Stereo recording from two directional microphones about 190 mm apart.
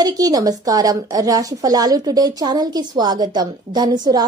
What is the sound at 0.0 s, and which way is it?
A woman's voice, 20° right (ahead or behind).